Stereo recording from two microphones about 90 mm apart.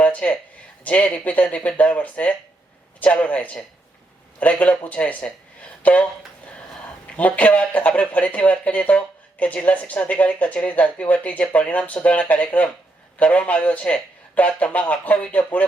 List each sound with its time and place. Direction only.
0.0 s a sound: 15° left (ahead or behind)
0.9 s speech: 15° left (ahead or behind)
7.2 s speech: 15° left (ahead or behind)